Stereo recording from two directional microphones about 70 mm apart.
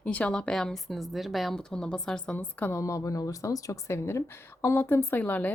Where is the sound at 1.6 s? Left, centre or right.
Centre.